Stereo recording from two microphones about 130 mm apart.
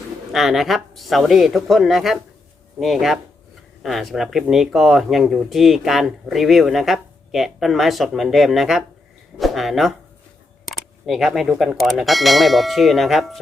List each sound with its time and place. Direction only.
0.3 s speech: centre (ahead or behind)